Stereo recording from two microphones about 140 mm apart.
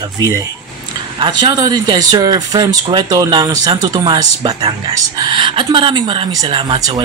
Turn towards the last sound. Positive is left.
turn(degrees=-30)  # may be behind; listen again after turning